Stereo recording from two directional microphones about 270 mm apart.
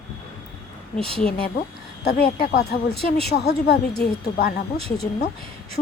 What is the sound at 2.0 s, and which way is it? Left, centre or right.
A woman's voice, left.